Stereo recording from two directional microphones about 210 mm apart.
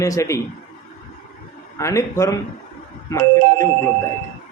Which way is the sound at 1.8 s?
15° left (ahead or behind).